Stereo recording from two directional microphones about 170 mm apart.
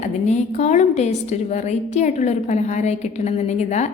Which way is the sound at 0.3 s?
45° left (ahead or behind).